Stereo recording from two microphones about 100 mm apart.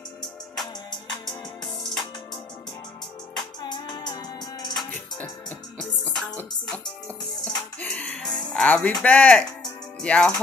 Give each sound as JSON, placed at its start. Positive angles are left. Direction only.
{"t": 1.8, "sound": "music", "side_deg": 5}
{"t": 3.6, "sound": "music", "side_deg": 45}
{"t": 5.8, "sound": "music", "side_deg": 10}
{"t": 9.0, "sound": "speech", "side_deg": 15}